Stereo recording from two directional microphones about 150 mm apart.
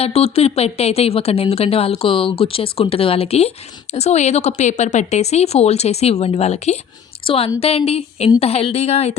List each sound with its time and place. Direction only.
0.0 s a woman's voice: 40° left (ahead or behind)